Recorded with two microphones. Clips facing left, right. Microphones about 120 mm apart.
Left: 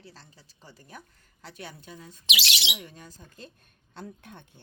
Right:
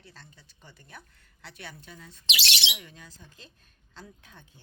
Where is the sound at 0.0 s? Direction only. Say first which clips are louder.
Left 2 dB; 35° left (ahead or behind).